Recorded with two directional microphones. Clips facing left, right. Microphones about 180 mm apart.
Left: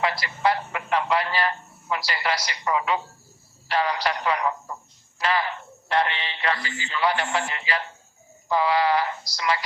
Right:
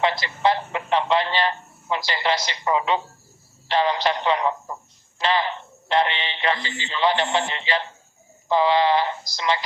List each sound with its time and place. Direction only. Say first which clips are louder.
0.0 s a man's voice: right 3 dB; 25° right (ahead or behind)